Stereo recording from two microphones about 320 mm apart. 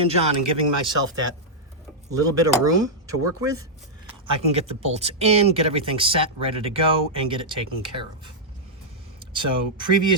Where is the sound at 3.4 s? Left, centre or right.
Centre.